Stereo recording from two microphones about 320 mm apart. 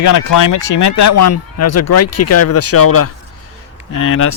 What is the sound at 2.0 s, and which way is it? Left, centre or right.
Speech, left.